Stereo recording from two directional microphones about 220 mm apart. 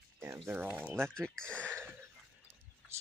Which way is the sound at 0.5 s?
10° right (ahead or behind).